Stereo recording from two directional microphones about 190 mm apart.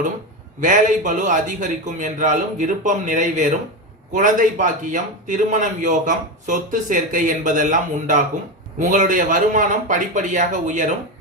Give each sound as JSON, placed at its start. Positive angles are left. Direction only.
{"t": 0.6, "sound": "a man's voice", "side_deg": -40}